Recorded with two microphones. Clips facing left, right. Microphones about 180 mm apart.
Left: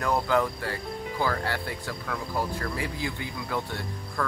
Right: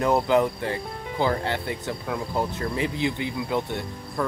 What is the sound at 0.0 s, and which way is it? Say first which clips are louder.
Speech: right 5 dB; 20° right (ahead or behind).